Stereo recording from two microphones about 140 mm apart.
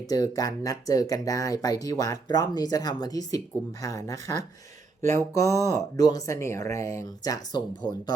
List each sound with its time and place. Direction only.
0.1 s speech: 25° left (ahead or behind)